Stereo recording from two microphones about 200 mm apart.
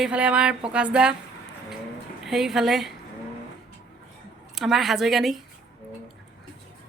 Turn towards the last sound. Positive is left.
turn(degrees=0)  # may be behind; listen again after turning